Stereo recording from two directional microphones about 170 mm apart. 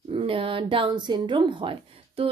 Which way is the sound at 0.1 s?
30° right (ahead or behind).